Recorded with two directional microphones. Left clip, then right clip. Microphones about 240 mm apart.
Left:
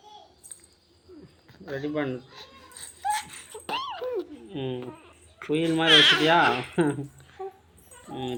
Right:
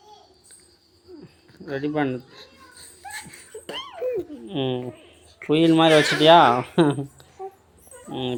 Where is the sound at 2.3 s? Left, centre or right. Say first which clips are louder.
Even; centre.